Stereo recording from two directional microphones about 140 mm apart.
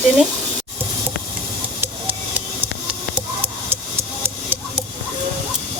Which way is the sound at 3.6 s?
15° right (ahead or behind).